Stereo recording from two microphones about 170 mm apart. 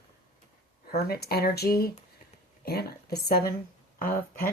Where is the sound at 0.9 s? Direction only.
65° left (ahead or behind).